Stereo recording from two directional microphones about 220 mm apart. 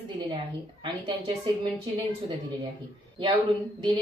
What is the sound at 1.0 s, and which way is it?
Speech, 20° right (ahead or behind).